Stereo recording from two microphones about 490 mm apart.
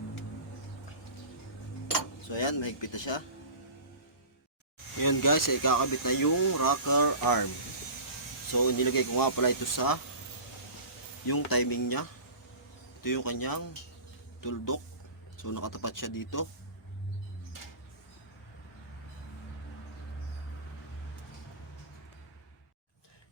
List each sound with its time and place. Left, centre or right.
2.3 s speech: left
4.9 s speech: left
8.5 s speech: left
11.3 s speech: left